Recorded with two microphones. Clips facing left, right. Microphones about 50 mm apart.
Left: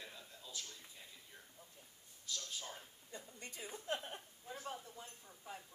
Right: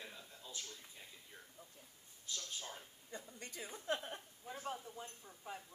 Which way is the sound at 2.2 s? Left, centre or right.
Right.